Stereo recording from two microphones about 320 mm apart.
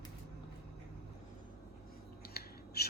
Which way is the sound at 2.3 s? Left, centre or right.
Left.